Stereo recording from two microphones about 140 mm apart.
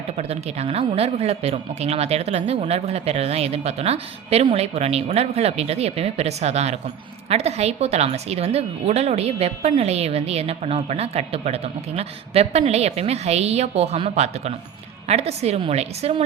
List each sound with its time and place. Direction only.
0.2 s a woman's voice: 45° right (ahead or behind)